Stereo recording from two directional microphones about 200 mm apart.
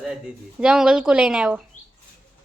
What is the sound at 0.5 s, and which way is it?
A woman's voice, 5° right (ahead or behind).